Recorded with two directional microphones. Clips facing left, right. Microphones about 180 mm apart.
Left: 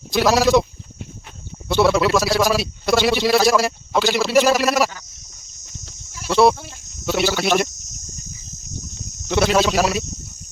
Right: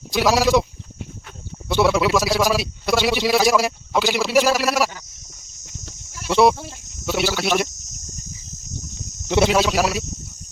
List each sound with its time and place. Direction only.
0.1 s a man's voice: 10° right (ahead or behind)
1.6 s a man's voice: 15° right (ahead or behind)
6.3 s speech: 15° right (ahead or behind)
9.2 s a sound: 25° right (ahead or behind)
9.5 s a man's voice: 10° right (ahead or behind)